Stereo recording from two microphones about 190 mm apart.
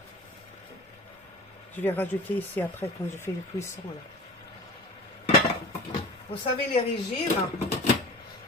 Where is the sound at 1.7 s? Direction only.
10° left (ahead or behind).